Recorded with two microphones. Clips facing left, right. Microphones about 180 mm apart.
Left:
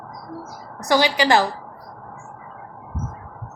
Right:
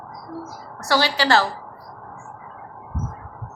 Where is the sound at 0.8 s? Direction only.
15° left (ahead or behind).